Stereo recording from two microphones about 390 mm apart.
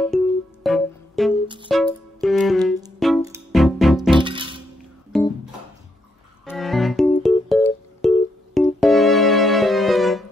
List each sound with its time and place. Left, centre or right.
0.1 s music: centre
4.2 s music: centre
5.1 s music: centre